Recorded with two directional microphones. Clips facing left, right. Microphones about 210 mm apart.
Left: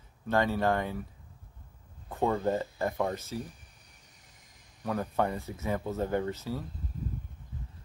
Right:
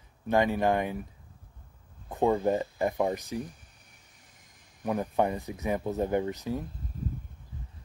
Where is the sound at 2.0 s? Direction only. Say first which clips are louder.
Right 3 dB; 15° right (ahead or behind).